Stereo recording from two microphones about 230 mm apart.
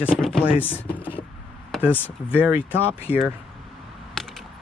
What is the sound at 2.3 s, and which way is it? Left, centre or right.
Speech, centre.